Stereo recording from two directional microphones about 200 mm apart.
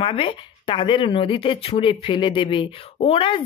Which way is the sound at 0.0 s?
25° left (ahead or behind).